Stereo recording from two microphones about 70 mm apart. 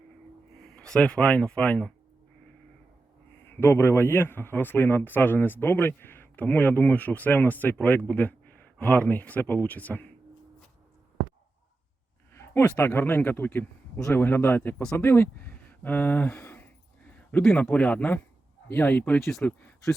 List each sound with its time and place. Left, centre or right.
0.6 s speech: centre
3.4 s speech: left
12.3 s speech: left
16.3 s a sound: left
17.6 s speech: left